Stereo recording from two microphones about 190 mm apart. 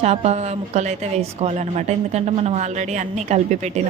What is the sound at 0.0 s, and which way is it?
A woman's voice, 35° right (ahead or behind).